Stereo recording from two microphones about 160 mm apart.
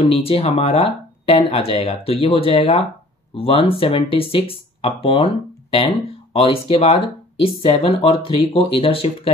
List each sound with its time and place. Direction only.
0.0 s speech: 35° left (ahead or behind)